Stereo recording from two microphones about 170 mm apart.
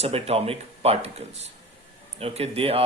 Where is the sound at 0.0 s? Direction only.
35° right (ahead or behind).